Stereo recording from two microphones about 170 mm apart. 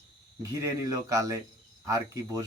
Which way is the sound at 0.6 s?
20° right (ahead or behind).